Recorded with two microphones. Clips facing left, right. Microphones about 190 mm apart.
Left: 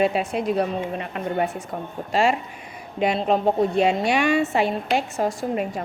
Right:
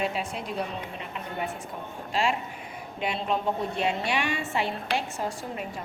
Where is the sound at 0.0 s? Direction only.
70° left (ahead or behind).